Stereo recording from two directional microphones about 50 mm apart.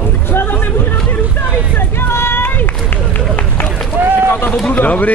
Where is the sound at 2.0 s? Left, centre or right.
Left.